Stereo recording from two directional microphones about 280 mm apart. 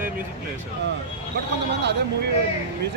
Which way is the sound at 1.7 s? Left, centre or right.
Right.